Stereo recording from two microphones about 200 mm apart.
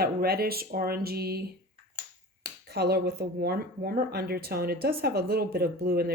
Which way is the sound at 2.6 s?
55° right (ahead or behind).